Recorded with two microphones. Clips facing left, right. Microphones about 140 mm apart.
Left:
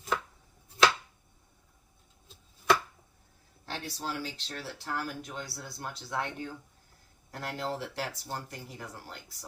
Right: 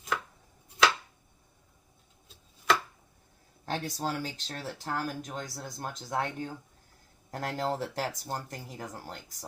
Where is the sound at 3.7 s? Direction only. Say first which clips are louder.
Right 4 dB; 45° right (ahead or behind).